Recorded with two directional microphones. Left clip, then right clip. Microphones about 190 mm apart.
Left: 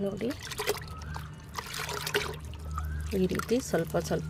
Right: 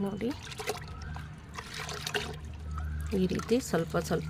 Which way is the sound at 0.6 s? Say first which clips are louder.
Left 6 dB; 25° left (ahead or behind).